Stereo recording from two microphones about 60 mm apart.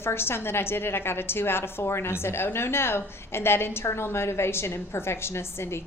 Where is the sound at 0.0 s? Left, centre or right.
Left.